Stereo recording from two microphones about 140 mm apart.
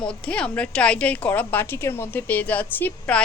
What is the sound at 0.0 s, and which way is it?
A woman's voice, 5° left (ahead or behind).